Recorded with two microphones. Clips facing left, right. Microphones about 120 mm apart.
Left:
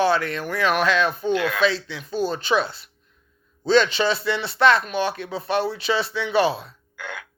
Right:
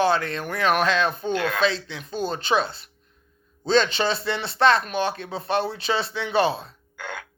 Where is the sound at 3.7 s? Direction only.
35° right (ahead or behind).